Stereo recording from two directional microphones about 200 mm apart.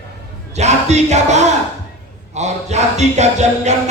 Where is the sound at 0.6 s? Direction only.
35° right (ahead or behind).